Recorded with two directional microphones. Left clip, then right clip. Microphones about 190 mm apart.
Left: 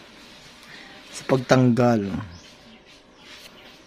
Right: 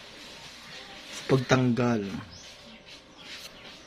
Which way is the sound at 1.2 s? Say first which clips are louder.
Left 5 dB; 55° left (ahead or behind).